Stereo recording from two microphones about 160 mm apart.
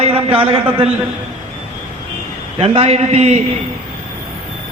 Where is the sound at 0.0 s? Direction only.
35° right (ahead or behind).